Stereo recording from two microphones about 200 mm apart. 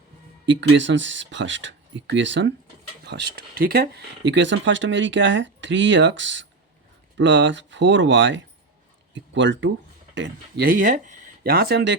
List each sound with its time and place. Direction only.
0.4 s speech: 65° right (ahead or behind)
10.2 s speech: 45° right (ahead or behind)